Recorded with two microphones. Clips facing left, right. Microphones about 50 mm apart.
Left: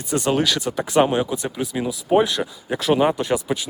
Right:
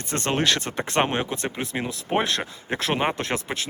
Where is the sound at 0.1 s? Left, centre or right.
Right.